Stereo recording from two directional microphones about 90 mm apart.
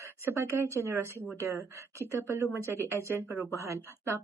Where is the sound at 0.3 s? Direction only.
30° right (ahead or behind).